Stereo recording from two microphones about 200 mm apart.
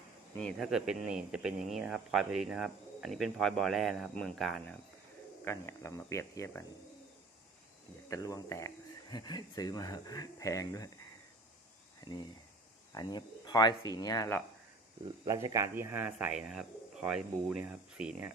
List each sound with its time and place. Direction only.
0.3 s speech: centre (ahead or behind)
5.5 s speech: 15° left (ahead or behind)
8.1 s speech: 15° left (ahead or behind)
11.9 s a sound: 20° left (ahead or behind)
12.9 s speech: 20° left (ahead or behind)
15.2 s speech: 15° right (ahead or behind)